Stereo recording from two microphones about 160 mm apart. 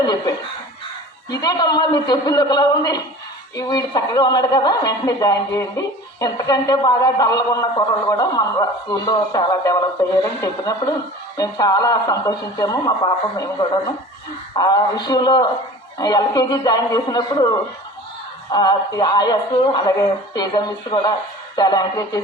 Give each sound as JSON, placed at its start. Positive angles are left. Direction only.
{"t": 0.0, "sound": "speech", "side_deg": 25}
{"t": 18.5, "sound": "speech", "side_deg": 25}